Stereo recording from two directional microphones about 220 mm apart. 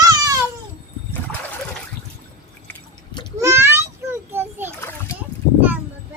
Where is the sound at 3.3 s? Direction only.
10° right (ahead or behind).